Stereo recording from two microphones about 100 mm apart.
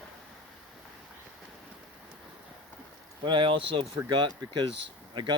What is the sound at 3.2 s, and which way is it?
Speech, 55° right (ahead or behind).